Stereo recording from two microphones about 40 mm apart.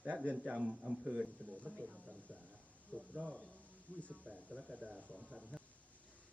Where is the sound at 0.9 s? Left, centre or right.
Centre.